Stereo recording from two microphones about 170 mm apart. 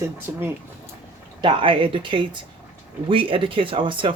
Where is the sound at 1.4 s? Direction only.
30° right (ahead or behind).